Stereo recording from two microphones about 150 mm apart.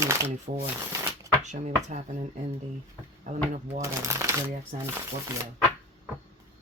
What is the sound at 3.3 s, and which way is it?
Speech, 65° right (ahead or behind).